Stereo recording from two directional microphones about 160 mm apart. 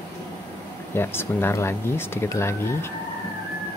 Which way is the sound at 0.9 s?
15° left (ahead or behind).